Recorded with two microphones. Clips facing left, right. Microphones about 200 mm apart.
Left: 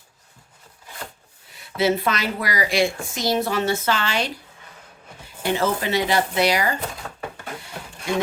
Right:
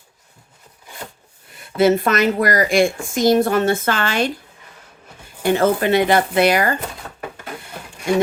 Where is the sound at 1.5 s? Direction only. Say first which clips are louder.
Right 6 dB; 50° right (ahead or behind).